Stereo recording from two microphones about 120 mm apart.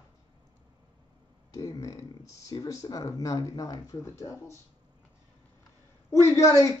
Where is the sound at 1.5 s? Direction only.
30° left (ahead or behind).